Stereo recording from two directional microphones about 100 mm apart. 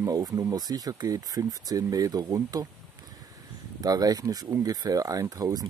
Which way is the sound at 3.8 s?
40° right (ahead or behind).